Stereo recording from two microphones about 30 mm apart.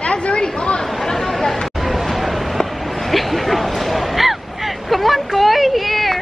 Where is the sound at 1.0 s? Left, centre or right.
Centre.